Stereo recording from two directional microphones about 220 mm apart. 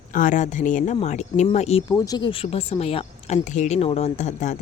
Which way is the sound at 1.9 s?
15° left (ahead or behind).